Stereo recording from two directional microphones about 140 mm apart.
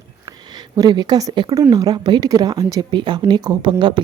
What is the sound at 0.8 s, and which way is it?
A woman's voice, 30° right (ahead or behind).